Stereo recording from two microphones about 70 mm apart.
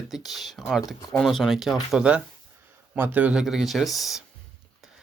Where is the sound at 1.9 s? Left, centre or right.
Centre.